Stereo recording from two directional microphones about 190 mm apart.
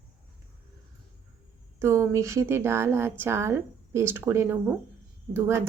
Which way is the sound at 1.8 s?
15° right (ahead or behind).